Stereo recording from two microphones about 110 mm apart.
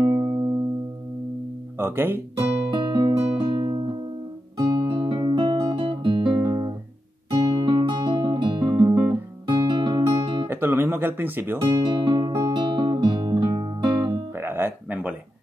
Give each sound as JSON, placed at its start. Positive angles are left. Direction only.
{"t": 0.0, "sound": "music", "side_deg": -50}
{"t": 1.8, "sound": "speech", "side_deg": -20}
{"t": 2.7, "sound": "music", "side_deg": -40}
{"t": 4.6, "sound": "guitar", "side_deg": -35}
{"t": 7.2, "sound": "music", "side_deg": -35}
{"t": 8.8, "sound": "guitar", "side_deg": -30}
{"t": 9.5, "sound": "guitar", "side_deg": -45}
{"t": 10.5, "sound": "music", "side_deg": -20}
{"t": 11.7, "sound": "music", "side_deg": -40}
{"t": 14.3, "sound": "music", "side_deg": -20}